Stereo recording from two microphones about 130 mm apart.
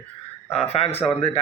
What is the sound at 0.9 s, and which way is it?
Speech, 55° left (ahead or behind).